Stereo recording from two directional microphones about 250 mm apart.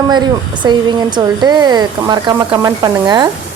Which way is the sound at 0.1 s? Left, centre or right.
Centre.